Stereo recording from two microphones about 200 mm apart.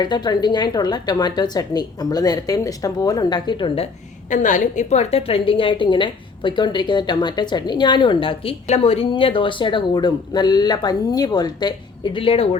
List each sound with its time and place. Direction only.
0.0 s a woman's voice: 20° left (ahead or behind)
4.3 s a woman's voice: 40° left (ahead or behind)